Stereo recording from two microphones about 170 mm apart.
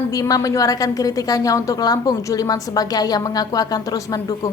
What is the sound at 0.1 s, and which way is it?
A woman's voice, 20° left (ahead or behind).